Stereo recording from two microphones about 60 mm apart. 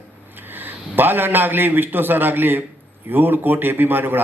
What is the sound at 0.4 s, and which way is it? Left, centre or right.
A man's voice, right.